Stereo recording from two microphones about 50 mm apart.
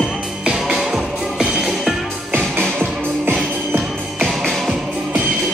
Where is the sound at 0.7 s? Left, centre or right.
Centre.